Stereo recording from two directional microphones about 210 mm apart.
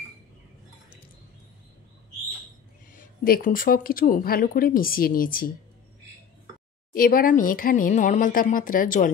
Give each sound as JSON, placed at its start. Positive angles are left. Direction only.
{"t": 3.0, "sound": "speech", "side_deg": 40}
{"t": 6.9, "sound": "speech", "side_deg": 45}